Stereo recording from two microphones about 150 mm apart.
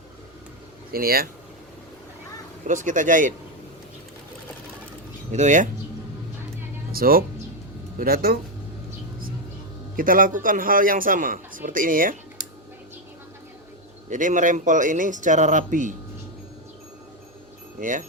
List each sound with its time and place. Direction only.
0.9 s speech: 85° right
2.6 s a man's voice: 60° right (ahead or behind)
5.3 s speech: 55° right (ahead or behind)
6.9 s speech: 75° right (ahead or behind)
9.9 s a man's voice: 65° right (ahead or behind)
14.1 s a man's voice: 60° right (ahead or behind)
17.7 s speech: 60° right (ahead or behind)